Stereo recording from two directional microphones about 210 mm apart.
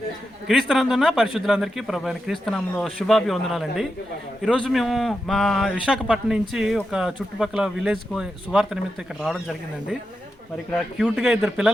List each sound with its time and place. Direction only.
0.4 s speech: centre (ahead or behind)